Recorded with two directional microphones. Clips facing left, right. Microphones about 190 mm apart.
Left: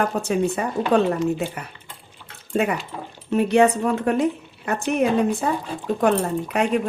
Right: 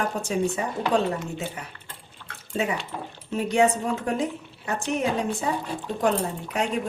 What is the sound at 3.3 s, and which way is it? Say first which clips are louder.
A woman's voice: left 5 dB; 65° left (ahead or behind).